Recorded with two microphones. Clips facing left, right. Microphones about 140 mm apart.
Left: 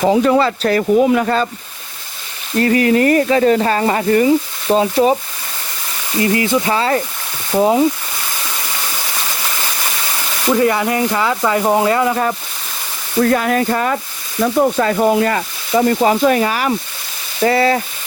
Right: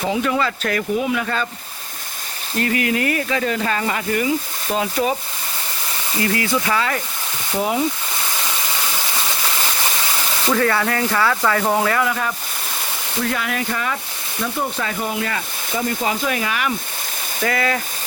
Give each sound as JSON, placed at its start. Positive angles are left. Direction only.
{"t": 0.0, "sound": "speech", "side_deg": 40}
{"t": 2.6, "sound": "speech", "side_deg": 35}
{"t": 6.1, "sound": "speech", "side_deg": 25}
{"t": 10.5, "sound": "speech", "side_deg": 20}
{"t": 15.2, "sound": "speech", "side_deg": 40}